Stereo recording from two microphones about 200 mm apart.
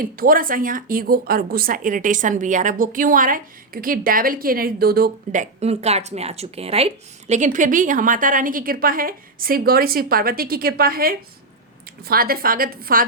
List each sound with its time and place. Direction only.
0.0 s speech: 45° right (ahead or behind)